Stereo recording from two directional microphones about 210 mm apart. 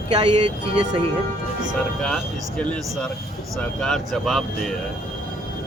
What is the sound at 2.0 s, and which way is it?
Speech, 5° left (ahead or behind).